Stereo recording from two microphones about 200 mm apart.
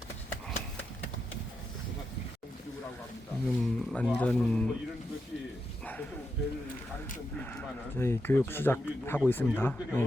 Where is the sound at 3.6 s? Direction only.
5° left (ahead or behind).